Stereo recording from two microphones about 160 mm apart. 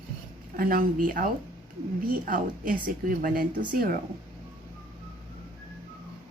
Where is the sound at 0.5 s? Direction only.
65° right (ahead or behind).